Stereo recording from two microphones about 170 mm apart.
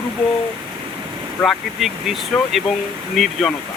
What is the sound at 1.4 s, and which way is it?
Speech, centre (ahead or behind).